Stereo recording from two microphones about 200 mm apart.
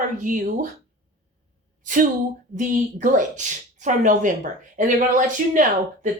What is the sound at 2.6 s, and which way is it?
A woman's voice, 40° right (ahead or behind).